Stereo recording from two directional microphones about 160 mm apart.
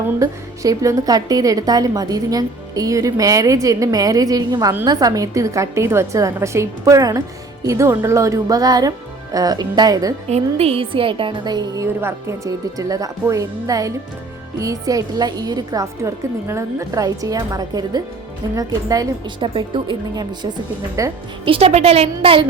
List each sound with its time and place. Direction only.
0.2 s a woman's voice: 20° right (ahead or behind)
10.2 s a woman's voice: 40° right (ahead or behind); by 21.1 s 25° right (ahead or behind)
21.4 s a woman's voice: 35° right (ahead or behind)